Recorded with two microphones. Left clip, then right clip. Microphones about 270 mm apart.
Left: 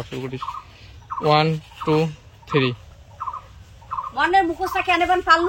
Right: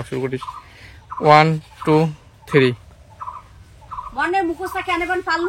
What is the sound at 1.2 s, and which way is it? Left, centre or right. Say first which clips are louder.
Speech: right 6 dB; centre.